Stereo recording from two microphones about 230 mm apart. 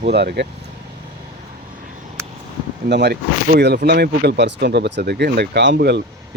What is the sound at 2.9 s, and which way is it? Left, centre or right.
Speech, right.